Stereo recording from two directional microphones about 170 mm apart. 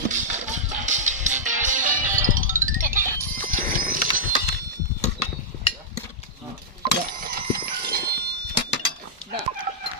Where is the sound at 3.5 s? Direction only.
55° right (ahead or behind).